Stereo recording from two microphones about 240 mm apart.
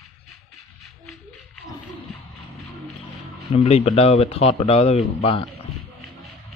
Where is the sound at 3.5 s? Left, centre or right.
Left.